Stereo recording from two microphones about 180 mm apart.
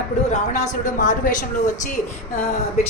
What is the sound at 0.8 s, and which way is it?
Speech, 45° left (ahead or behind).